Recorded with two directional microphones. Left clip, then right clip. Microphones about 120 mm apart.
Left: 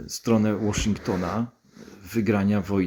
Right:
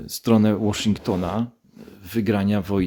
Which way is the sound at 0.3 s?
45° right (ahead or behind).